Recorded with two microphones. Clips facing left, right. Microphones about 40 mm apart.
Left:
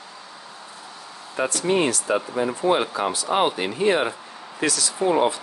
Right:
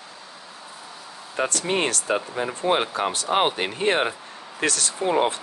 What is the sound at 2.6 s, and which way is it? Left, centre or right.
Speech, right.